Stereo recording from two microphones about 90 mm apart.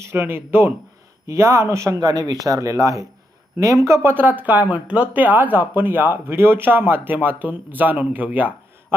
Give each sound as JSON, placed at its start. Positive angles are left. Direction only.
{"t": 0.0, "sound": "speech", "side_deg": -25}
{"t": 2.0, "sound": "speech", "side_deg": -45}